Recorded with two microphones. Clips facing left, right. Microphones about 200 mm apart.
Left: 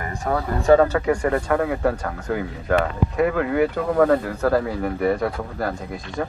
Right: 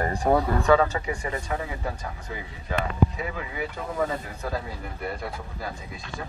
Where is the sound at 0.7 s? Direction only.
55° left (ahead or behind).